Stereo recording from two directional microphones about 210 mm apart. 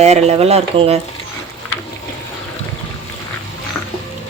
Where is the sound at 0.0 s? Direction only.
30° right (ahead or behind).